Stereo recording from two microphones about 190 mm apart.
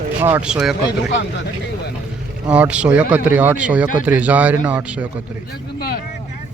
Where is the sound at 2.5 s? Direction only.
5° right (ahead or behind).